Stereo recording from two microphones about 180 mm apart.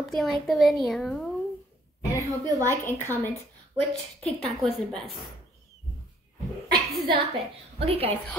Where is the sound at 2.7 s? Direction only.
10° left (ahead or behind).